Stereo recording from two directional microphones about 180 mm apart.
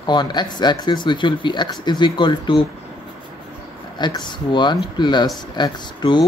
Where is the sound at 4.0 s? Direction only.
25° left (ahead or behind).